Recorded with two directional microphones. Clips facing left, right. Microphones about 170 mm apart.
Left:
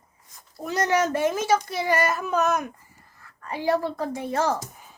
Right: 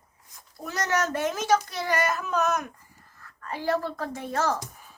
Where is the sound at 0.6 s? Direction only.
10° left (ahead or behind).